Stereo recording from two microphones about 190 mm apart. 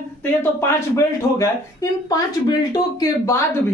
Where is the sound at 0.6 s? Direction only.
15° left (ahead or behind).